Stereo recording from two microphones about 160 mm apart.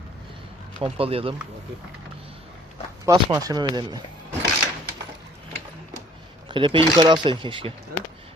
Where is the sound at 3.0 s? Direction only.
20° right (ahead or behind).